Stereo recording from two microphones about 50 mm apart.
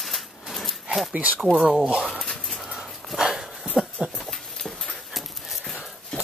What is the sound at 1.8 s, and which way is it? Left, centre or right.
Speech, right.